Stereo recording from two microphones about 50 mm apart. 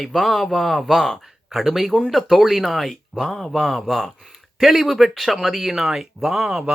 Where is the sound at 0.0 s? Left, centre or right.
Centre.